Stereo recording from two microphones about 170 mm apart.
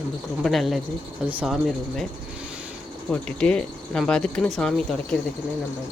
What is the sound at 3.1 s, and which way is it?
Speech, 5° left (ahead or behind).